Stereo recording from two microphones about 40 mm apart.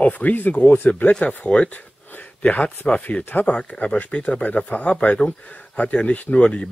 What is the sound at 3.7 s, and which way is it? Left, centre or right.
Speech, left.